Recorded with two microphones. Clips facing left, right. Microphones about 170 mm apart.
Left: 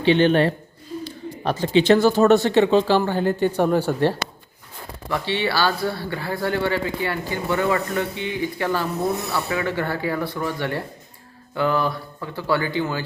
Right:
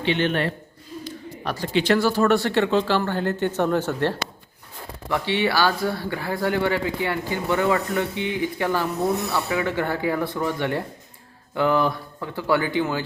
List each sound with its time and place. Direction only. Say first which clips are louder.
0.0 s a woman's voice: left 6 dB; 35° left (ahead or behind); by 4.1 s 10° left (ahead or behind)
5.0 s speech: right 1 dB; 15° right (ahead or behind)